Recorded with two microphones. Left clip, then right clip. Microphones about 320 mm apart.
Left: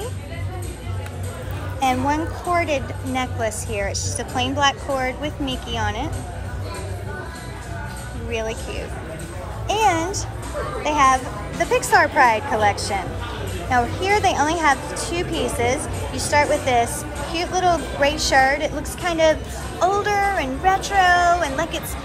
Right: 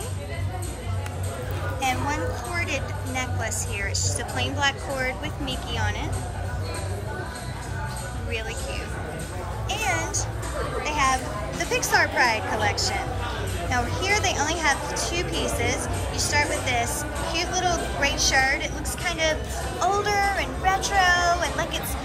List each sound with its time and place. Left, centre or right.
1.8 s speech: centre
9.8 s a sound: centre
10.8 s a woman's voice: centre
12.7 s a woman's voice: right
13.7 s speech: centre
15.6 s speech: right
16.8 s a woman's voice: centre
18.3 s a woman's voice: right
18.8 s speech: centre